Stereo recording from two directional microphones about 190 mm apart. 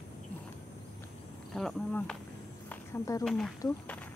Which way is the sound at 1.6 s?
Centre (ahead or behind).